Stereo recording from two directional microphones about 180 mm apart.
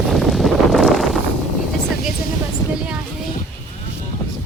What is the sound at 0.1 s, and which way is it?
Wind noise, centre (ahead or behind).